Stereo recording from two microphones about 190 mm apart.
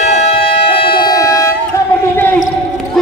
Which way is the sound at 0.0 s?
30° left (ahead or behind).